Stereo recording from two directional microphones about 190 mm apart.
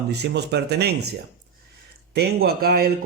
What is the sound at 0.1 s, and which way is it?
Speech, 60° right (ahead or behind).